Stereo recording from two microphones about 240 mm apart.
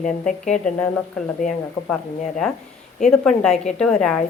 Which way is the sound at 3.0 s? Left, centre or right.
Centre.